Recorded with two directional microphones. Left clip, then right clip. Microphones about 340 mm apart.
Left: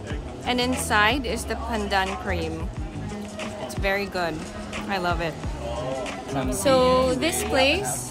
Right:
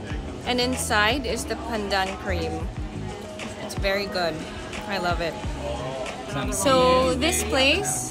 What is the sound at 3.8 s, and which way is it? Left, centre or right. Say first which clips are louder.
A woman's voice: right 1 dB; centre.